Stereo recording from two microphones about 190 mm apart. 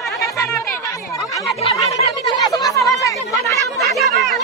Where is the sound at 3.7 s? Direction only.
Centre (ahead or behind).